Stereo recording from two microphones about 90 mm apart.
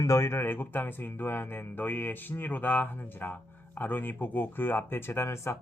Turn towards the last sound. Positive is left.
turn(degrees=30)  # may be behind; listen again after turning